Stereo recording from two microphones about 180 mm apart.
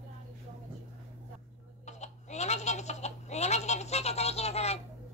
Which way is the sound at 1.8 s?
40° left (ahead or behind).